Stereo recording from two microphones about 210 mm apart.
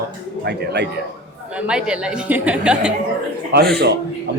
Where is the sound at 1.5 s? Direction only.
5° right (ahead or behind).